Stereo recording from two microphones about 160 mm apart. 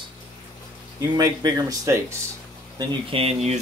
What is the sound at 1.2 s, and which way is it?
Speech, 25° right (ahead or behind).